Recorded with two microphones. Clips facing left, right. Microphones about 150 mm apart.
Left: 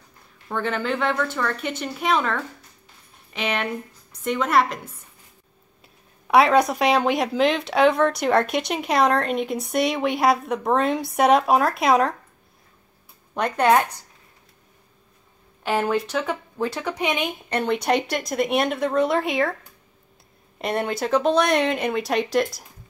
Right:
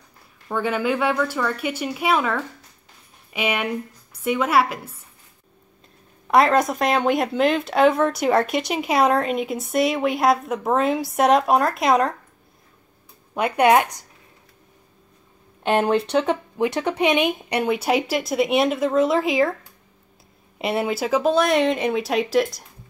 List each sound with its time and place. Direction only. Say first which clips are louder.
0.5 s speech: right 3 dB; 10° right (ahead or behind)
6.2 s speech: even; centre (ahead or behind)
13.3 s speech: right 2 dB; 10° right (ahead or behind)
15.9 s speech: right 4 dB; 25° right (ahead or behind); by 19.5 s centre (ahead or behind)
20.5 s speech: right 2 dB; 5° right (ahead or behind)